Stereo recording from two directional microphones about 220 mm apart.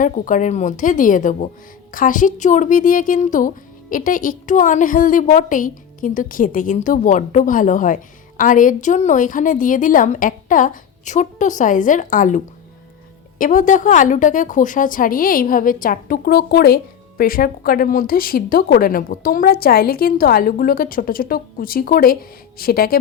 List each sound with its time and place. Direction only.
0.0 s a woman's voice: 35° left (ahead or behind)
13.4 s a woman's voice: 35° left (ahead or behind)